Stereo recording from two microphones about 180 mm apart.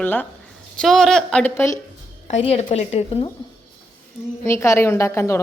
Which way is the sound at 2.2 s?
35° left (ahead or behind).